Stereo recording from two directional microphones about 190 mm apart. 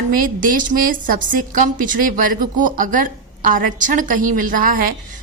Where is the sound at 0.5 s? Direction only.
45° right (ahead or behind).